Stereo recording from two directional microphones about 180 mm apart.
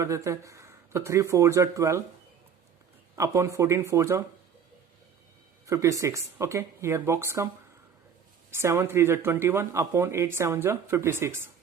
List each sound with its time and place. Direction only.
0.0 s speech: 15° right (ahead or behind)
3.2 s speech: 15° right (ahead or behind)
5.6 s speech: 15° right (ahead or behind)